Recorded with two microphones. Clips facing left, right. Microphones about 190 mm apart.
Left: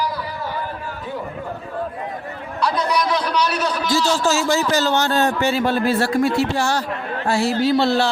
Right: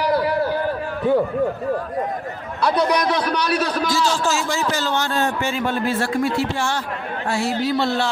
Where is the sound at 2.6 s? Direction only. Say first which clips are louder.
Right 2 dB; 60° right (ahead or behind).